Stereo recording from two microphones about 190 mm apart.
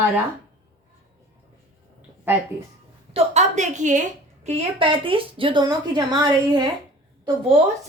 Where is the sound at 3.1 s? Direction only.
35° right (ahead or behind).